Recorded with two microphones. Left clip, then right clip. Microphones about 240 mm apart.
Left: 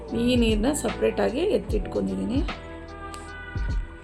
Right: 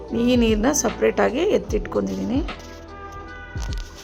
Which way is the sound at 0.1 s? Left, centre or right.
Right.